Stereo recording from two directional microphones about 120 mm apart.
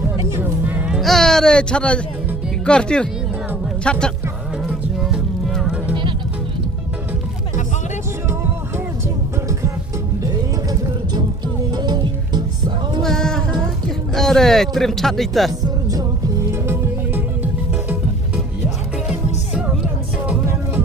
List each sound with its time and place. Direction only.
0.3 s music: 15° right (ahead or behind); by 2.0 s 10° left (ahead or behind)
2.6 s speech: 10° left (ahead or behind)
4.9 s music: 5° right (ahead or behind)
11.7 s music: 35° right (ahead or behind)
13.0 s a sound: 5° left (ahead or behind)
14.1 s speech: 5° left (ahead or behind)
15.9 s music: 25° right (ahead or behind)
19.5 s music: 10° right (ahead or behind)